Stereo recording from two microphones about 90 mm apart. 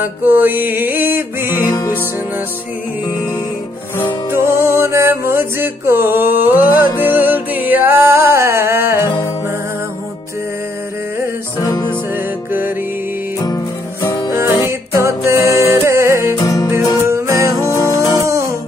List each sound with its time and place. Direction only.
0.2 s music: 20° right (ahead or behind)
1.7 s music: 45° left (ahead or behind)
4.3 s music: 30° right (ahead or behind)
11.6 s music: 45° left (ahead or behind)
14.0 s music: 40° left (ahead or behind)
14.3 s music: 30° right (ahead or behind)
16.3 s music: 45° left (ahead or behind)
16.7 s music: 30° right (ahead or behind)
17.6 s music: 35° left (ahead or behind)